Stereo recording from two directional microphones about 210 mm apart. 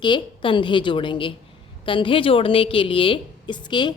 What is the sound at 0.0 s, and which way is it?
A woman's voice, 20° left (ahead or behind).